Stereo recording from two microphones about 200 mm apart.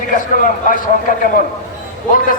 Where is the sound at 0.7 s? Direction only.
45° left (ahead or behind).